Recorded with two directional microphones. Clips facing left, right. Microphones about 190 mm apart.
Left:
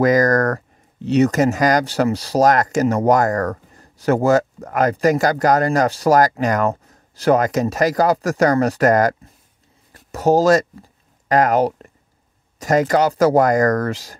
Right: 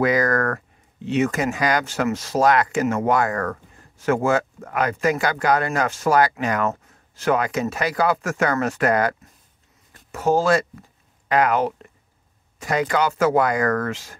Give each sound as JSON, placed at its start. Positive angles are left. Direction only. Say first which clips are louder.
{"t": 0.0, "sound": "speech", "louder": "left 5 dB", "side_deg": 40}
{"t": 9.9, "sound": "a sound", "louder": "left 4 dB", "side_deg": 35}
{"t": 12.5, "sound": "speech", "louder": "left 5 dB", "side_deg": 40}